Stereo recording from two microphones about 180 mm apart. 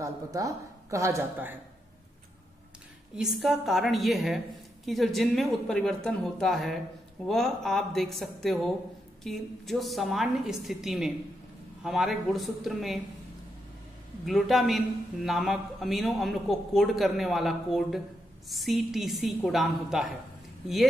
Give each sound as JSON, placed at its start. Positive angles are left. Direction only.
{"t": 0.0, "sound": "a woman's voice", "side_deg": -20}
{"t": 3.2, "sound": "a man's voice", "side_deg": 0}
{"t": 14.2, "sound": "a man's voice", "side_deg": 0}